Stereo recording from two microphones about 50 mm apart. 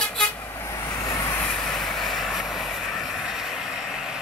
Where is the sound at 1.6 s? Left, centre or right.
Centre.